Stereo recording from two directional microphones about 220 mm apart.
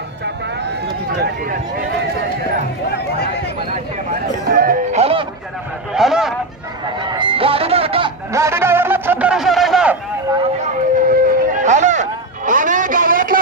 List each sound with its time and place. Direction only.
1.1 s run: 45° right (ahead or behind)
4.4 s music: 40° right (ahead or behind)
5.9 s a sound: centre (ahead or behind)
7.0 s music: 20° right (ahead or behind)
8.3 s music: 15° right (ahead or behind)
10.9 s a sound: 40° right (ahead or behind)